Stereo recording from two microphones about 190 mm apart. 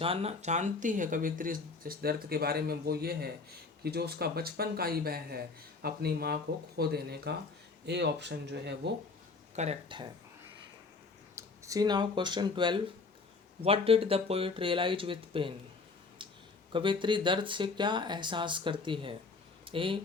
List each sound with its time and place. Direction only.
0.0 s speech: 30° right (ahead or behind); by 8.9 s 65° right (ahead or behind)
9.6 s speech: 30° right (ahead or behind)
11.3 s speech: 15° right (ahead or behind)
16.7 s speech: 25° right (ahead or behind)